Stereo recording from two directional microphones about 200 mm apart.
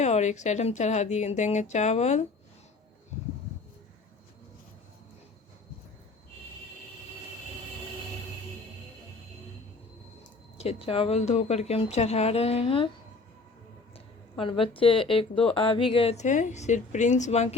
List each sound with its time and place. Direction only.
0.0 s a woman's voice: 35° left (ahead or behind)
10.6 s speech: 30° left (ahead or behind)
14.3 s speech: 25° left (ahead or behind)